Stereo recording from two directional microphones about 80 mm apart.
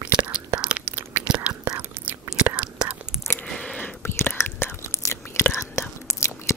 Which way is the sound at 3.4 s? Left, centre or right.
Centre.